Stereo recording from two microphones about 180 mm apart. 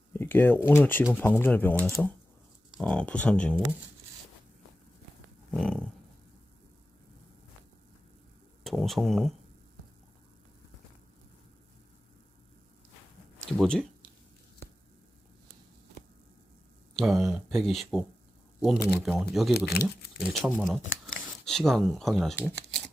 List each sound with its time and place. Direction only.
0.1 s speech: 10° left (ahead or behind)
5.5 s a sound: 5° left (ahead or behind)
8.6 s speech: centre (ahead or behind)
13.5 s speech: 5° left (ahead or behind)
17.0 s speech: centre (ahead or behind)
19.8 s speech: 60° left (ahead or behind)
20.3 s speech: centre (ahead or behind)